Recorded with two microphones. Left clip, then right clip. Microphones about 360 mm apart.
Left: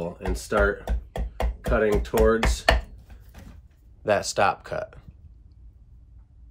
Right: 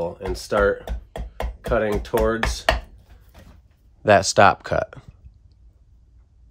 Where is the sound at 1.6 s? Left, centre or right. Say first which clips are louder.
Right 1 dB; right.